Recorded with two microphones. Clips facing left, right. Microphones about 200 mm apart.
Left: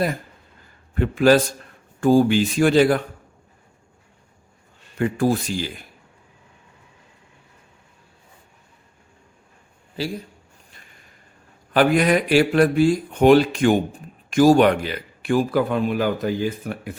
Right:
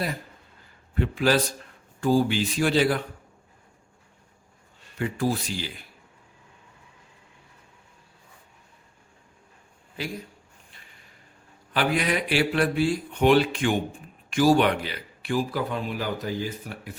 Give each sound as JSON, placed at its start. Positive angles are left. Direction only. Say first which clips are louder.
{"t": 0.9, "sound": "speech", "louder": "left 7 dB", "side_deg": 50}
{"t": 4.9, "sound": "speech", "louder": "left 6 dB", "side_deg": 50}
{"t": 10.0, "sound": "speech", "louder": "left 6 dB", "side_deg": 30}
{"t": 11.7, "sound": "speech", "louder": "left 8 dB", "side_deg": 45}